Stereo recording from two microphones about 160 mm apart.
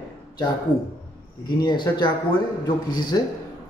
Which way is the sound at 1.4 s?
25° left (ahead or behind).